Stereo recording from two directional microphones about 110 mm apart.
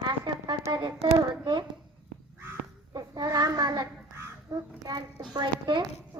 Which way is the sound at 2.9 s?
35° right (ahead or behind).